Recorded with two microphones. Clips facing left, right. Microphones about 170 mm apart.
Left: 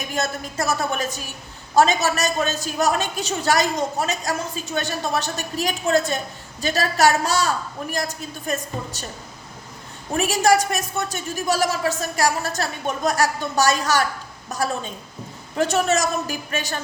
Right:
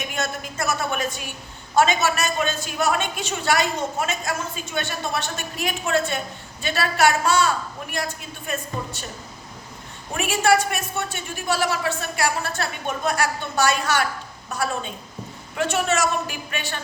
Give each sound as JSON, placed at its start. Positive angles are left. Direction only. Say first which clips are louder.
{"t": 0.1, "sound": "a woman's voice", "louder": "left 3 dB", "side_deg": 35}
{"t": 10.2, "sound": "a woman's voice", "louder": "left 2 dB", "side_deg": 40}